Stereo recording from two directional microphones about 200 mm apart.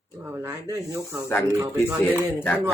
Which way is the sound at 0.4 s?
15° right (ahead or behind).